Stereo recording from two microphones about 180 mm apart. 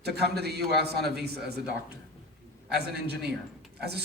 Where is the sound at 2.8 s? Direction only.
65° right (ahead or behind).